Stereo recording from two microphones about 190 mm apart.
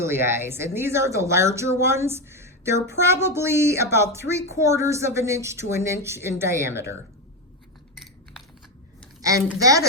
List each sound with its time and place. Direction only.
0.0 s speech: 15° right (ahead or behind)
9.6 s speech: 20° right (ahead or behind)